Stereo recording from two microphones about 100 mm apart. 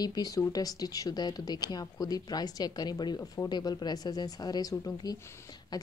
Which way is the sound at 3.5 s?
45° left (ahead or behind).